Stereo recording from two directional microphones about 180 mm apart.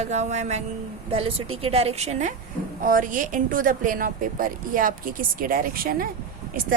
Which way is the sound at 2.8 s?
50° right (ahead or behind).